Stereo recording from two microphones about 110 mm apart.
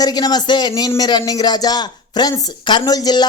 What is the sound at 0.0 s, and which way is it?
Speech, 40° left (ahead or behind).